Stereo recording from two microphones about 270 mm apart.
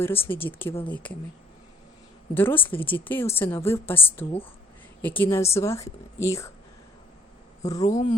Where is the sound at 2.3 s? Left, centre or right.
Centre.